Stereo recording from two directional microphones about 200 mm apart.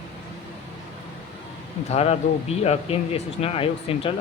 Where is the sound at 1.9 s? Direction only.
30° left (ahead or behind).